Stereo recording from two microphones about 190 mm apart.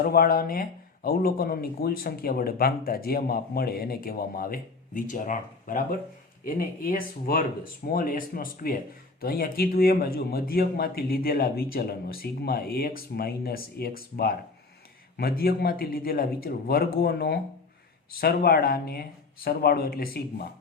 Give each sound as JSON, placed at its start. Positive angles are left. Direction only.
{"t": 0.0, "sound": "speech", "side_deg": 50}